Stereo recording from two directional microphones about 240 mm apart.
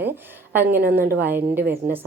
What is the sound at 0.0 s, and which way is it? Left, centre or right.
A woman's voice, centre.